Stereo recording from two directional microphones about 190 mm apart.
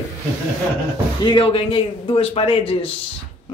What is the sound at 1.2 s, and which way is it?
A man's voice, 25° left (ahead or behind).